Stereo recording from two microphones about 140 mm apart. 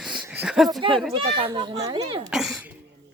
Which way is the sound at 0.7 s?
35° right (ahead or behind).